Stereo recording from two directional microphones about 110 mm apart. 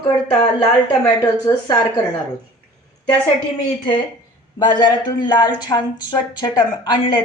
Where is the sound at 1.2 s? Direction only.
40° left (ahead or behind).